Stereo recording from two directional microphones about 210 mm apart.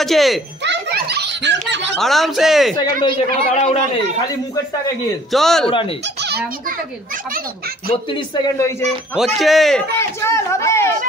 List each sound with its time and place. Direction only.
0.0 s speech: centre (ahead or behind)
0.7 s baby laughter: 50° right (ahead or behind)
2.0 s speech: centre (ahead or behind)
2.8 s a man's voice: 25° left (ahead or behind)
5.3 s speech: centre (ahead or behind)
5.7 s a man's voice: 25° left (ahead or behind)
8.5 s speech: 10° left (ahead or behind)
9.1 s speech: centre (ahead or behind)